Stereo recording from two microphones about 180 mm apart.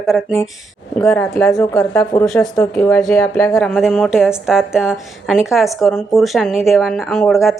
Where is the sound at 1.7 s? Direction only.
15° left (ahead or behind).